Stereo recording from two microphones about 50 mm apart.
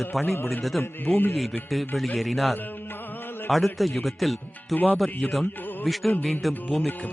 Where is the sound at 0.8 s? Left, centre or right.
Left.